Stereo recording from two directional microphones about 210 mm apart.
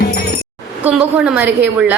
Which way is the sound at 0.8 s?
5° right (ahead or behind).